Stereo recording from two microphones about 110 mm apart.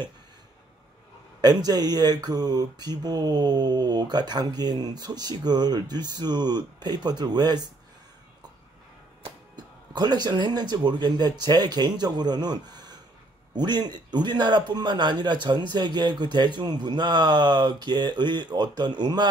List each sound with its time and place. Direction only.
1.4 s speech: 40° right (ahead or behind)
9.9 s a man's voice: 40° right (ahead or behind)